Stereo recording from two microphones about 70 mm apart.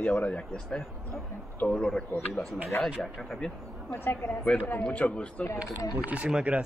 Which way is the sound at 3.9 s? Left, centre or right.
Left.